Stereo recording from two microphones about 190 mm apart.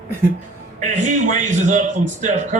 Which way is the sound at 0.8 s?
40° right (ahead or behind).